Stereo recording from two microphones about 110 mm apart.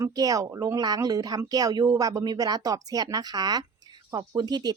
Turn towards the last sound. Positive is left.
turn(degrees=-40)  # may be behind; listen again after turning